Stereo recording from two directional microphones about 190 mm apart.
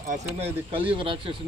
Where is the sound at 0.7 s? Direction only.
25° right (ahead or behind).